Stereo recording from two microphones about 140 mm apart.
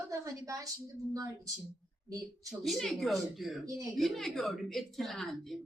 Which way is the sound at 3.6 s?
25° right (ahead or behind).